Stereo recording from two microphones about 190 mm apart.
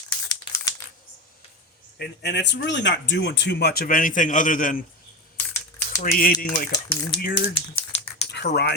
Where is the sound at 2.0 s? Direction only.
60° left (ahead or behind); by 4.8 s 45° left (ahead or behind).